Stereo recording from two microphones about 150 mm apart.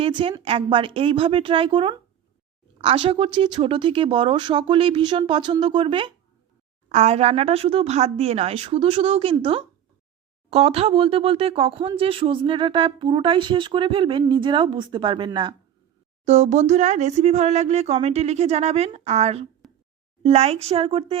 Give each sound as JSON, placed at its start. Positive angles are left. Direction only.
{"t": 0.0, "sound": "speech", "side_deg": -35}
{"t": 6.8, "sound": "speech", "side_deg": -50}
{"t": 16.2, "sound": "speech", "side_deg": -50}